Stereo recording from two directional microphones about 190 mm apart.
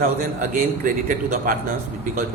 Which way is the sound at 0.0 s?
45° right (ahead or behind).